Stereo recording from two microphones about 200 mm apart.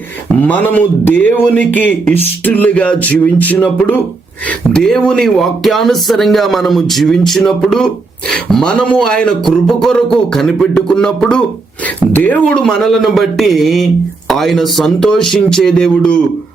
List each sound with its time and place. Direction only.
0.4 s speech: 10° left (ahead or behind)